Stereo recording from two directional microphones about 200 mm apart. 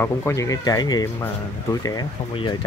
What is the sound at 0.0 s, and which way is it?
Speech, 15° left (ahead or behind).